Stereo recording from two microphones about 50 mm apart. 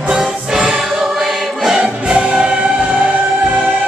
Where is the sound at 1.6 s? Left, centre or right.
Centre.